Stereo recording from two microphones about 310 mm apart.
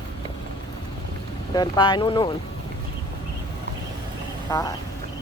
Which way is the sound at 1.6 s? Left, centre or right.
Centre.